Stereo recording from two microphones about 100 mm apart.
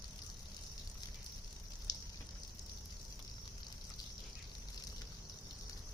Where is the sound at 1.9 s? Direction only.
40° left (ahead or behind).